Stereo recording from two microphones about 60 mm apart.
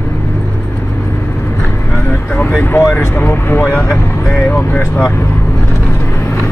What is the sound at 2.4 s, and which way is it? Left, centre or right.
Speech, left.